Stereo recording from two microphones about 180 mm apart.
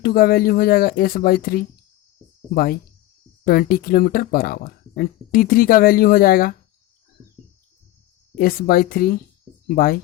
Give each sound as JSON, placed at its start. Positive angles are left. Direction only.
{"t": 0.0, "sound": "speech", "side_deg": 55}
{"t": 8.4, "sound": "speech", "side_deg": 55}